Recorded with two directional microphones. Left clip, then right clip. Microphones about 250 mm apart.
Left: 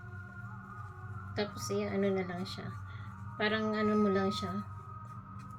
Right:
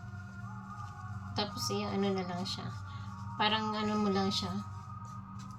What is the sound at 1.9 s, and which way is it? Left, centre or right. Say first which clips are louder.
A woman's voice: left 1 dB; right.